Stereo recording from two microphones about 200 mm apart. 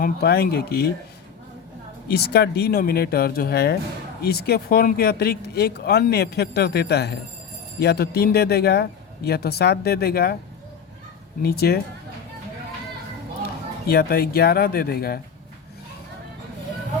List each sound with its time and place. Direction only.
0.0 s speech: 55° left (ahead or behind)
2.0 s speech: 55° left (ahead or behind)
11.4 s speech: 50° left (ahead or behind)
13.8 s speech: 50° left (ahead or behind)